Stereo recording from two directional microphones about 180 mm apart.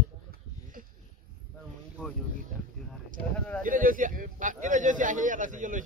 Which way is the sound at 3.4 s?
5° left (ahead or behind).